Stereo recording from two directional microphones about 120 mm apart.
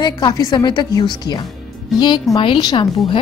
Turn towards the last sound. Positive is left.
turn(degrees=40)  # may be behind; listen again after turning